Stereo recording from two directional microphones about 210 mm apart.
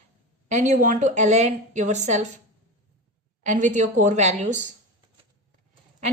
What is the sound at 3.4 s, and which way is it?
A woman's voice, 35° right (ahead or behind).